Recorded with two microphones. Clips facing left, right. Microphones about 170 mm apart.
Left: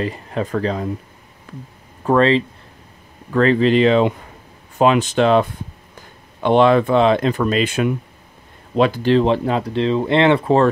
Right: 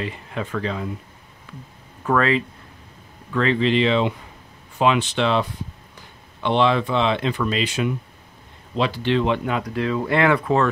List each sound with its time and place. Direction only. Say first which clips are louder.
0.0 s speech: left 6 dB; 40° left (ahead or behind)
2.0 s speech: left 5 dB; 30° left (ahead or behind)
3.3 s speech: left 5 dB; 40° left (ahead or behind)